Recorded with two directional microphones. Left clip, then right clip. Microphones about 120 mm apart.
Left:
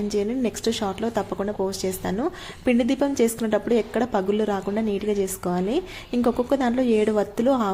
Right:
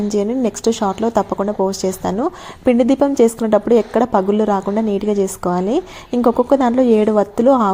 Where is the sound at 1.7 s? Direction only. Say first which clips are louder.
Right 7 dB; 40° right (ahead or behind).